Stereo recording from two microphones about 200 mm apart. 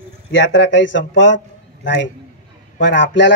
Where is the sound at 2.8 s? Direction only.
65° left (ahead or behind).